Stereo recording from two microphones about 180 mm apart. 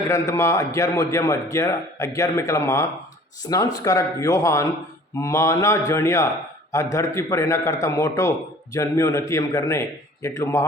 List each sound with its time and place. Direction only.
0.1 s a man's voice: 15° left (ahead or behind)